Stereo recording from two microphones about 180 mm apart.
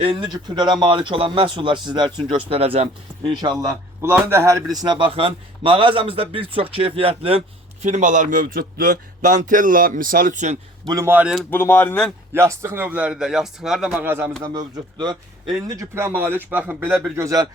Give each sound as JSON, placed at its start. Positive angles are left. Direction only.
{"t": 0.0, "sound": "speech", "side_deg": -30}
{"t": 4.0, "sound": "a man's voice", "side_deg": -15}
{"t": 10.8, "sound": "speech", "side_deg": -15}
{"t": 11.5, "sound": "speech", "side_deg": 10}
{"t": 12.3, "sound": "speech", "side_deg": -15}
{"t": 14.4, "sound": "speech", "side_deg": -20}